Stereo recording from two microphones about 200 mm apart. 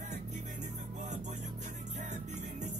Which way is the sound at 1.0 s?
35° right (ahead or behind).